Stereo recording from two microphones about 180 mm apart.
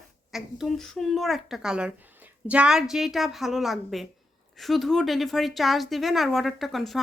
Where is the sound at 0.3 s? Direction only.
Centre (ahead or behind).